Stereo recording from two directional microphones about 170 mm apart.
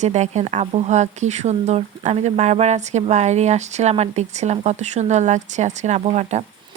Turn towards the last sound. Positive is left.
turn(degrees=-40)  # may be behind; listen again after turning